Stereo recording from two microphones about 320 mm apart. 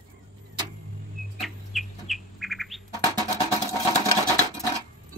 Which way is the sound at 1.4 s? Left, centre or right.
Centre.